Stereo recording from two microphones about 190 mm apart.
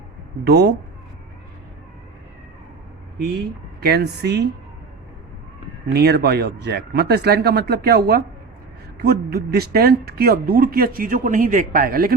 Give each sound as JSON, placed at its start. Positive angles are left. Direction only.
{"t": 0.4, "sound": "speech", "side_deg": -55}
{"t": 3.8, "sound": "speech", "side_deg": -55}
{"t": 5.9, "sound": "speech", "side_deg": -60}